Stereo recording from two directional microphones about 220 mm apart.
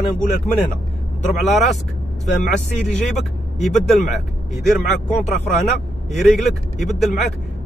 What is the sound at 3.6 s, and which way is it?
Speech, centre (ahead or behind).